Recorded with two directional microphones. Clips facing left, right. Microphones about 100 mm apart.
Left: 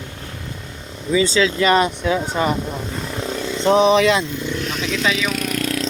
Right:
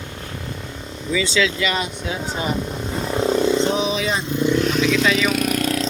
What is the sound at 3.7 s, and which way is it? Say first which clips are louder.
Speech: left 8 dB; 60° left (ahead or behind).